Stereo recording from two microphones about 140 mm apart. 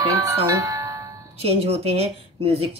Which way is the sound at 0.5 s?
25° right (ahead or behind).